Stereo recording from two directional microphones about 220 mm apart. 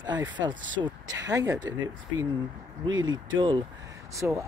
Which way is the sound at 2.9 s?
60° right (ahead or behind).